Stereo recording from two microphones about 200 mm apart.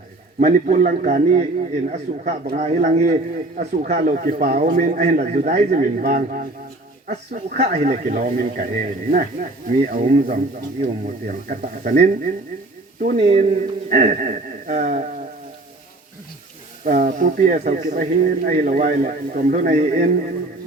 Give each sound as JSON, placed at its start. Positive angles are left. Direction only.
{"t": 0.3, "sound": "speech", "side_deg": -40}
{"t": 7.1, "sound": "speech", "side_deg": -35}
{"t": 16.8, "sound": "speech", "side_deg": -45}